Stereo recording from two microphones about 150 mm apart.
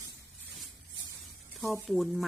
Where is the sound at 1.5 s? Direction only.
Centre (ahead or behind).